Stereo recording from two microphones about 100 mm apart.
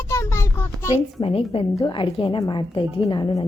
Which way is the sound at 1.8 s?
55° left (ahead or behind).